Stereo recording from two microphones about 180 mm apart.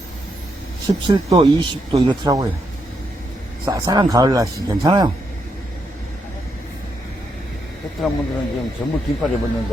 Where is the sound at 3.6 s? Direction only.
20° right (ahead or behind).